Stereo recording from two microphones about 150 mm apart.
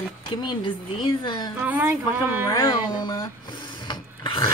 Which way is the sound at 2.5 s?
20° left (ahead or behind).